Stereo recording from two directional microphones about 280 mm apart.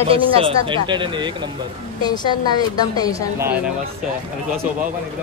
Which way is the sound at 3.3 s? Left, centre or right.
Centre.